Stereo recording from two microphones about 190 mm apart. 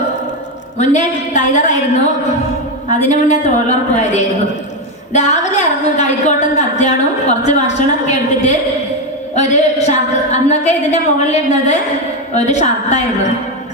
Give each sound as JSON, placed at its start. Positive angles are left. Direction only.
{"t": 0.8, "sound": "a woman's voice", "side_deg": 40}
{"t": 2.9, "sound": "a woman's voice", "side_deg": 40}